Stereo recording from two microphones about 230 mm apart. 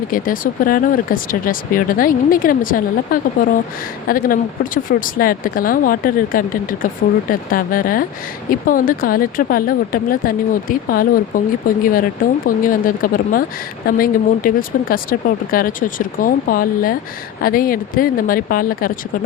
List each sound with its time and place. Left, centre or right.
0.1 s speech: left